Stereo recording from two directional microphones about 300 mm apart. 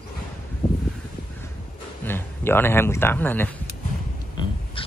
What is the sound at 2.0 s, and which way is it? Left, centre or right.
Speech, centre.